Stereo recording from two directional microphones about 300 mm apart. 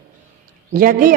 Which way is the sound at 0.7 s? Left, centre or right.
Right.